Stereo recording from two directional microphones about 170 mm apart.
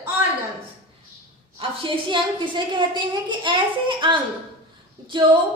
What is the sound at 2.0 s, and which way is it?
A woman's voice, 30° right (ahead or behind).